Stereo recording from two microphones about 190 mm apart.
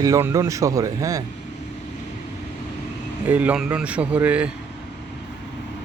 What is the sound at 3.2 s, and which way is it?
Speech, 10° right (ahead or behind).